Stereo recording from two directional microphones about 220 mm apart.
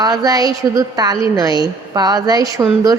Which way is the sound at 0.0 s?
15° right (ahead or behind).